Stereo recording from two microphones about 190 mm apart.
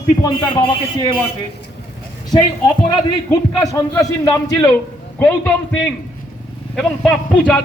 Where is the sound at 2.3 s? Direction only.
20° left (ahead or behind).